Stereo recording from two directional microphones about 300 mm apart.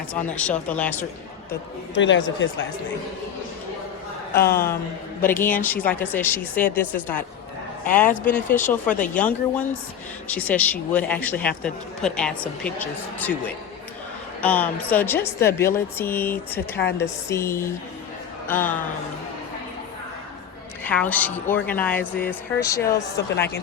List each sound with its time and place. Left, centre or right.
0.1 s speech: centre
2.0 s speech: left
4.4 s speech: centre
14.4 s speech: centre
20.8 s speech: centre
23.2 s speech: left